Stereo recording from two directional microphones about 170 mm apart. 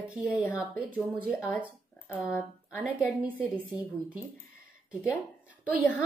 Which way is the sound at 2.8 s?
5° right (ahead or behind).